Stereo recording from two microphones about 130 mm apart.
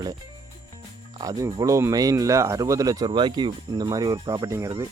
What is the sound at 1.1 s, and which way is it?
Speech, 30° right (ahead or behind).